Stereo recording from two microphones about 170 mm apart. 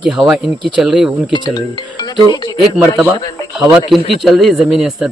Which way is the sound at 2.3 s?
25° left (ahead or behind).